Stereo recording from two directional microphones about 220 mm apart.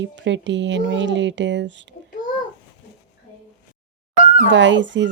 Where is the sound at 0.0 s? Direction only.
55° right (ahead or behind).